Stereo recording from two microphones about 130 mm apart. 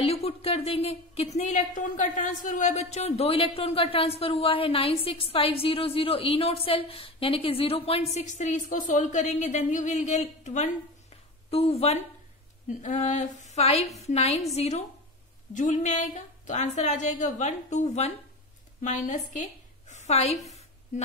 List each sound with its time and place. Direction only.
0.0 s a woman's voice: 50° left (ahead or behind)
8.1 s a woman's voice: 60° left (ahead or behind)
11.5 s a woman's voice: 50° left (ahead or behind)
12.6 s a woman's voice: 70° left (ahead or behind)
15.5 s a woman's voice: 70° left (ahead or behind)
18.8 s a woman's voice: 75° left (ahead or behind); by 20.3 s 55° left (ahead or behind)